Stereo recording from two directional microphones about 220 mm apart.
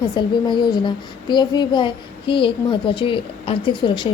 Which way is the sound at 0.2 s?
20° left (ahead or behind).